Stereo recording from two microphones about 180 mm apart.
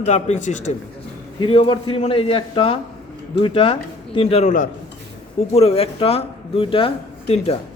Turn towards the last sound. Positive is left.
turn(degrees=35)  # may be behind; listen again after turning